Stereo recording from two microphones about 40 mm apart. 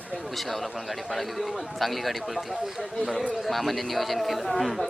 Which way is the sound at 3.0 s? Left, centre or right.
Centre.